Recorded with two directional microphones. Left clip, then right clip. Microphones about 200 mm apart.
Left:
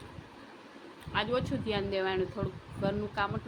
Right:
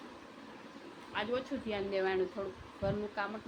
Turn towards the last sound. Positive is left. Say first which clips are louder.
# left 4 dB
turn(degrees=15)  # may be behind; listen again after turning